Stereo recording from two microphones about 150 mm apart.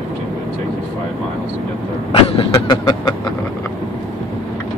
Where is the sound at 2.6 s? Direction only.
25° left (ahead or behind).